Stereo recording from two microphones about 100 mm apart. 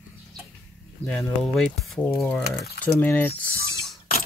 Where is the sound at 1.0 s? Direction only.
5° left (ahead or behind).